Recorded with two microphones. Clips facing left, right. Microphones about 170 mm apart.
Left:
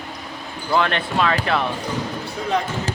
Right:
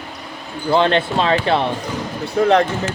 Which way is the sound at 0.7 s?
30° right (ahead or behind).